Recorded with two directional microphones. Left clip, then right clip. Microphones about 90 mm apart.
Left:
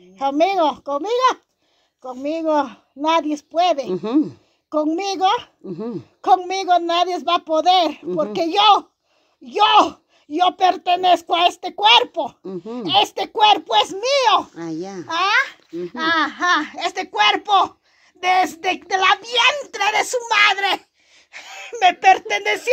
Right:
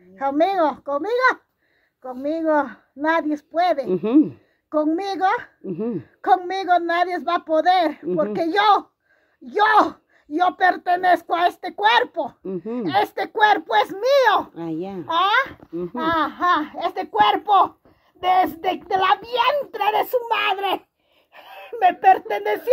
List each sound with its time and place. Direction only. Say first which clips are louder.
0.2 s speech: left 2 dB; 20° left (ahead or behind)
3.8 s a child's voice: right 2 dB; 15° right (ahead or behind)
4.6 s speech: left 1 dB; 20° left (ahead or behind)
5.7 s a child's voice: right 2 dB; 20° right (ahead or behind)
6.2 s speech: left 2 dB; 20° left (ahead or behind)
12.4 s a child's voice: right 2 dB; 15° right (ahead or behind)
12.8 s a child's voice: left 4 dB; 20° left (ahead or behind); by 20.1 s 20° right (ahead or behind)
20.1 s a child's voice: left 5 dB; 40° right (ahead or behind)
21.3 s speech: left 3 dB; 25° right (ahead or behind)